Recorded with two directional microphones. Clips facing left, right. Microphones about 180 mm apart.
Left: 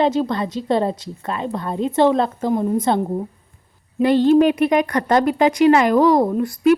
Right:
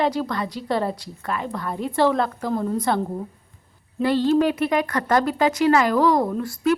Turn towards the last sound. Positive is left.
turn(degrees=20)  # may be behind; listen again after turning